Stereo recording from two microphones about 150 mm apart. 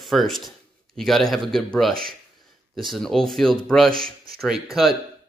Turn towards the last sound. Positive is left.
turn(degrees=0)  # may be behind; listen again after turning